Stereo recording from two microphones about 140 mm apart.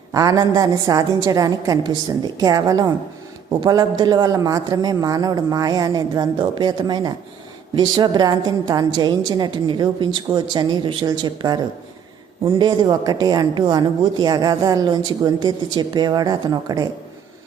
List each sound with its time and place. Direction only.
0.1 s a woman's voice: 25° right (ahead or behind)